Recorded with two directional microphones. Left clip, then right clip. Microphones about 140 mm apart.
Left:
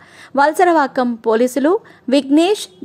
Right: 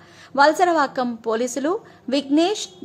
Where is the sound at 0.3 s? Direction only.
35° left (ahead or behind).